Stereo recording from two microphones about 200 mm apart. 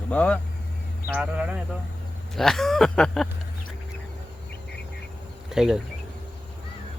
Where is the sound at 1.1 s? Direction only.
5° right (ahead or behind).